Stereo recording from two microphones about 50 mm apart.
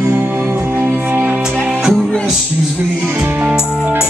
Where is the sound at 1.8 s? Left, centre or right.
Centre.